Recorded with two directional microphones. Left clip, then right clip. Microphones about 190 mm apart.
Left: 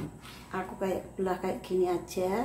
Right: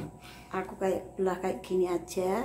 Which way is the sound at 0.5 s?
20° right (ahead or behind).